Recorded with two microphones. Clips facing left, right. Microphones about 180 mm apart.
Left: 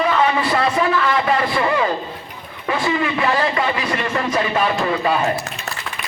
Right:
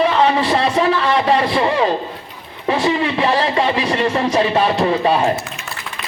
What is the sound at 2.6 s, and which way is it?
A man's voice, 30° right (ahead or behind).